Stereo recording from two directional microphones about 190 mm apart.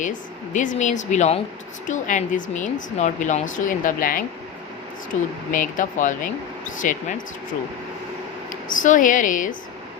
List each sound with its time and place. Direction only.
0.0 s speech: 40° left (ahead or behind)
8.4 s speech: 45° left (ahead or behind)